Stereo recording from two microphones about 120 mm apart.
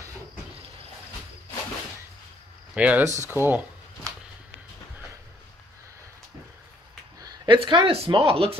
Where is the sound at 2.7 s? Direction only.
10° right (ahead or behind).